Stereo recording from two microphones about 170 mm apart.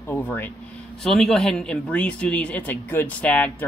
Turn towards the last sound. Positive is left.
turn(degrees=10)  # may be behind; listen again after turning